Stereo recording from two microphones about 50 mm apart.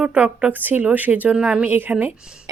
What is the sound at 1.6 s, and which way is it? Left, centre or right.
Speech, right.